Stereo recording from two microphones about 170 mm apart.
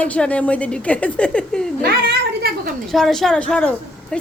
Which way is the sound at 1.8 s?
70° right (ahead or behind).